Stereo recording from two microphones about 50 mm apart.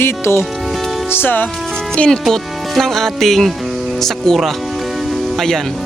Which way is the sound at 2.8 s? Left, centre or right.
Centre.